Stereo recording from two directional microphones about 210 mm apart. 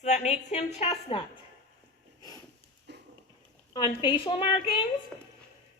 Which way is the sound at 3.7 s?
20° left (ahead or behind).